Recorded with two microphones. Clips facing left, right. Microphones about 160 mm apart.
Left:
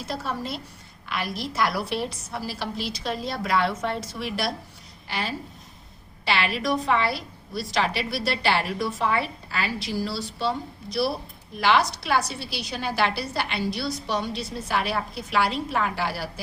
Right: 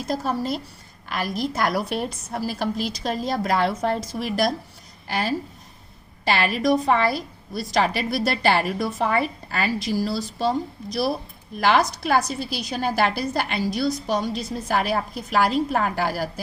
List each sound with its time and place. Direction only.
0.0 s a woman's voice: 40° right (ahead or behind)